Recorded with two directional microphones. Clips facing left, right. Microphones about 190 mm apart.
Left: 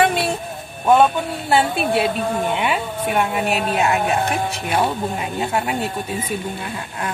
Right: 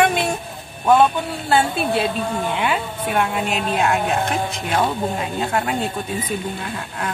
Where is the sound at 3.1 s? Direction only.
10° left (ahead or behind).